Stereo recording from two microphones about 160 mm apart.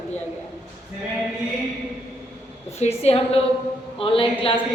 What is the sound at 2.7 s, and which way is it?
A woman's voice, 40° left (ahead or behind).